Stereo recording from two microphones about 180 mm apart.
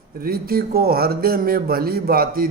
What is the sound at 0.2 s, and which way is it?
A man's voice, 55° right (ahead or behind).